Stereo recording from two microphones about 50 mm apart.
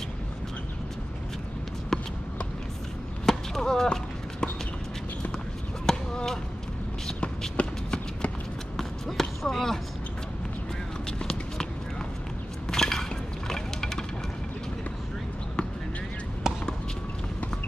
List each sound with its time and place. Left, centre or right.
1.9 s run: centre
3.3 s a sound: centre
5.9 s basketball bounce: centre
7.5 s shuffle: left
8.7 s basketball bounce: centre
11.1 s run: centre
12.6 s a sound: centre
13.5 s music: centre
16.5 s chop: centre